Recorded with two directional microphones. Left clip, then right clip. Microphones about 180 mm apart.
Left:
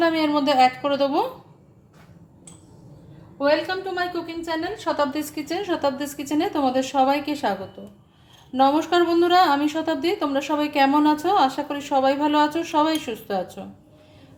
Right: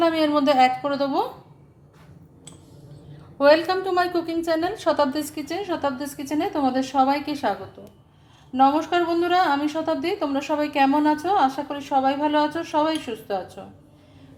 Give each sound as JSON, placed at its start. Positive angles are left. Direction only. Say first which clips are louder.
{"t": 0.0, "sound": "a woman's voice", "louder": "right 1 dB", "side_deg": 0}
{"t": 3.3, "sound": "a woman's voice", "louder": "right 4 dB", "side_deg": -40}
{"t": 5.1, "sound": "a woman's voice", "louder": "left 1 dB", "side_deg": 0}
{"t": 8.5, "sound": "a woman's voice", "louder": "even", "side_deg": 15}